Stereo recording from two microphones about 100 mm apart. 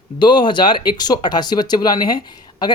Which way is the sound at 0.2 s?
50° left (ahead or behind).